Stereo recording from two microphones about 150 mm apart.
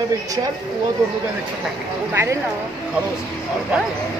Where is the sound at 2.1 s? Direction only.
15° right (ahead or behind).